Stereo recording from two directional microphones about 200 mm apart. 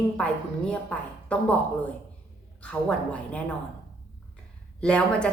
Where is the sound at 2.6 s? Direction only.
5° left (ahead or behind).